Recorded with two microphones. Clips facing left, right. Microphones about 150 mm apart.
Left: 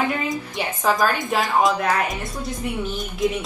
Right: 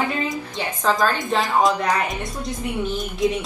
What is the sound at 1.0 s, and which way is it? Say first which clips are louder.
Speech: even; 5° left (ahead or behind).